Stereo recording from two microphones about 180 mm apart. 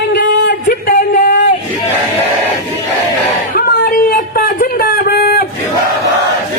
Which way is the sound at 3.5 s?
50° left (ahead or behind).